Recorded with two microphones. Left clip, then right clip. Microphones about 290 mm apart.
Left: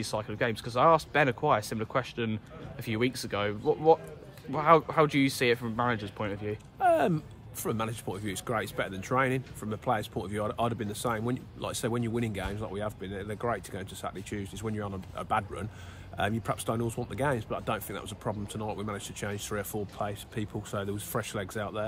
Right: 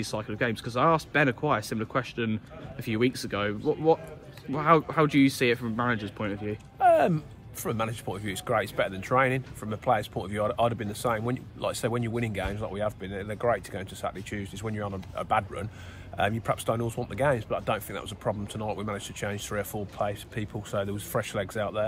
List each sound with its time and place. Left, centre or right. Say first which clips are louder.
0.0 s speech: right 1 dB; left
6.8 s speech: right 4 dB; centre